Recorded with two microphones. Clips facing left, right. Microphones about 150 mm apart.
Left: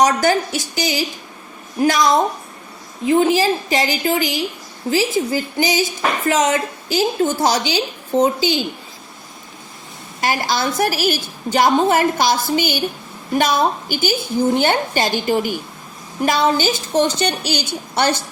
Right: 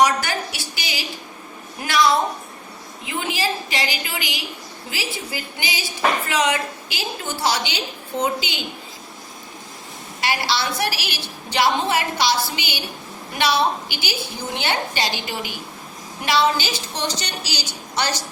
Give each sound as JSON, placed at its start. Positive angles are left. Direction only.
{"t": 0.0, "sound": "a woman's voice", "side_deg": 40}
{"t": 10.2, "sound": "a woman's voice", "side_deg": 45}